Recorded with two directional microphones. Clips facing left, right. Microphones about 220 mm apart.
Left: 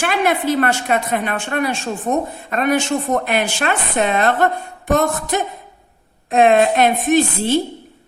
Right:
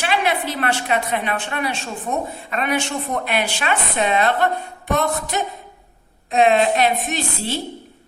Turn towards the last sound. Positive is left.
turn(degrees=50)  # may be behind; listen again after turning